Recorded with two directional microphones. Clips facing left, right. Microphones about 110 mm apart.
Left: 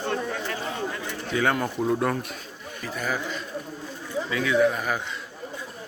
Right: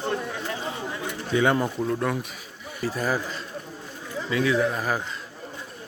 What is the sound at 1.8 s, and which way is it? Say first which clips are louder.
Speech: left 2 dB; 5° left (ahead or behind).